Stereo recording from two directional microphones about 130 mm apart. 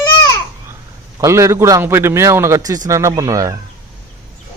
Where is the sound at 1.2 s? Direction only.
25° right (ahead or behind).